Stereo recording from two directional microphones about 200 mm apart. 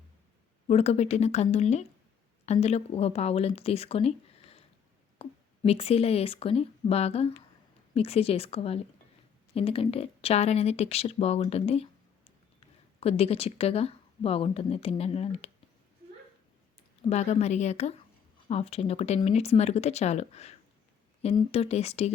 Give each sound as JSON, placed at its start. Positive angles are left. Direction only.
{"t": 0.7, "sound": "a woman's voice", "side_deg": 30}
{"t": 17.1, "sound": "speech", "side_deg": 35}